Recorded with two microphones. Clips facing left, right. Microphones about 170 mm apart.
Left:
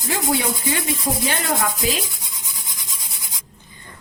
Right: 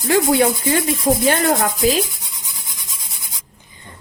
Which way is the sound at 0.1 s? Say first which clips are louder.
Right 7 dB; 55° right (ahead or behind).